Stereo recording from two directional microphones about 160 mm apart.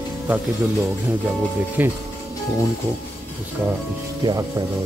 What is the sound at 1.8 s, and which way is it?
Speech, 10° right (ahead or behind).